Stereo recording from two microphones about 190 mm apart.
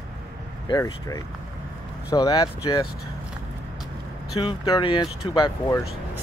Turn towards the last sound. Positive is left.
turn(degrees=25)  # may be behind; listen again after turning